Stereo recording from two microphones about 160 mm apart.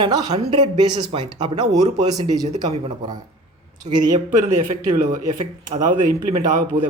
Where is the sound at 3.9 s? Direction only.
25° right (ahead or behind).